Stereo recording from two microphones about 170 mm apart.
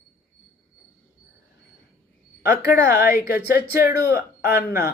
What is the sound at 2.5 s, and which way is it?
Speech, 75° left (ahead or behind).